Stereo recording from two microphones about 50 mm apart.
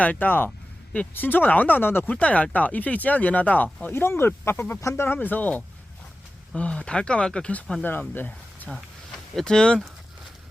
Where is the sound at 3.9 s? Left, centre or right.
Left.